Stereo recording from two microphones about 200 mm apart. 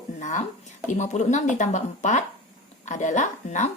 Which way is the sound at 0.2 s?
35° left (ahead or behind).